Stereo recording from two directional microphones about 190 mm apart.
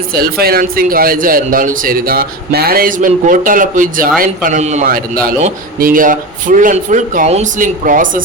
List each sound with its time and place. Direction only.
0.2 s a man's voice: 55° right (ahead or behind)